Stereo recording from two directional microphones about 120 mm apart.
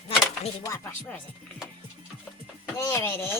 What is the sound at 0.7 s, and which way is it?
Speech, 25° left (ahead or behind).